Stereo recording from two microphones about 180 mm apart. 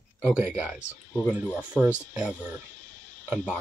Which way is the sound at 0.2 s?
5° right (ahead or behind).